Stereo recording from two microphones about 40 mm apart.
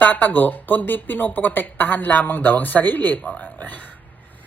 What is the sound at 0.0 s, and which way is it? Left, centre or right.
Speech, left.